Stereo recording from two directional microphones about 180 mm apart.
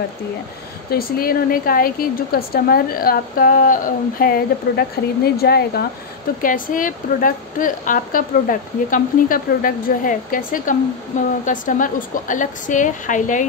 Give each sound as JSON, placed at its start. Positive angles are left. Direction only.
{"t": 0.8, "sound": "a woman's voice", "side_deg": 55}
{"t": 6.4, "sound": "a woman's voice", "side_deg": 50}